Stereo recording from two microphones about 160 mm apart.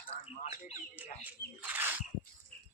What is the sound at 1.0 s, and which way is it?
Bird, 10° right (ahead or behind).